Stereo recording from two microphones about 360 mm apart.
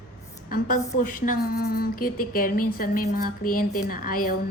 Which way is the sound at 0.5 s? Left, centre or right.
Left.